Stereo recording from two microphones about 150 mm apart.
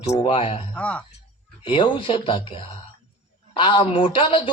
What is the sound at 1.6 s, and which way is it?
Speech, 35° left (ahead or behind).